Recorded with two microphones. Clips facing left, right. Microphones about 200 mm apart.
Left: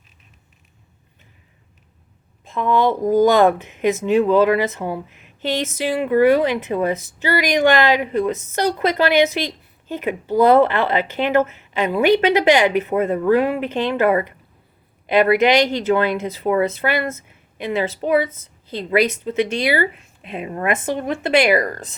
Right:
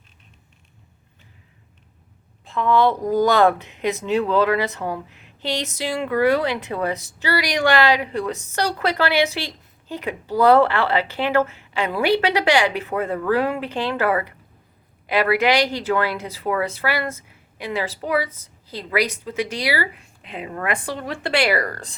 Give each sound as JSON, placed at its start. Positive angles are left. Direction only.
{"t": 2.4, "sound": "a woman's voice", "side_deg": 15}